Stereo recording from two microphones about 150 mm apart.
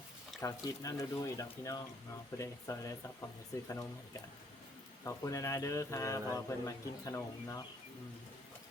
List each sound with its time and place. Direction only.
0.4 s speech: 20° left (ahead or behind)
5.0 s speech: 20° left (ahead or behind)